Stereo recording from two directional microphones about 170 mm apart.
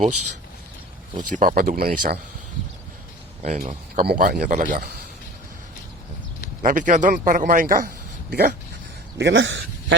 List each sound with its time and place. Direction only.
1.1 s speech: 50° right (ahead or behind)
3.4 s speech: 50° right (ahead or behind)
6.6 s a man's voice: 50° right (ahead or behind)
9.1 s speech: 90° right